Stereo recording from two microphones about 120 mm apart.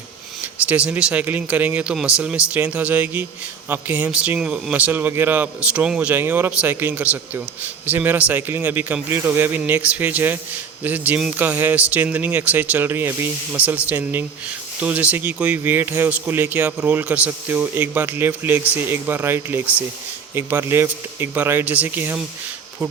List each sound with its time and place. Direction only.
0.4 s a man's voice: 10° right (ahead or behind)